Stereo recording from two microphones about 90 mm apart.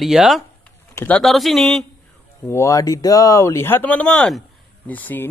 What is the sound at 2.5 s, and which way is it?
Speech, 35° left (ahead or behind).